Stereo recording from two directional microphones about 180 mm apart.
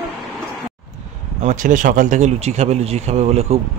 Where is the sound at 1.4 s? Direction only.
45° right (ahead or behind).